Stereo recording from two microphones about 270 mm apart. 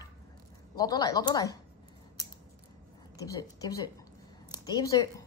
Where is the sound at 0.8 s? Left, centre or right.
Centre.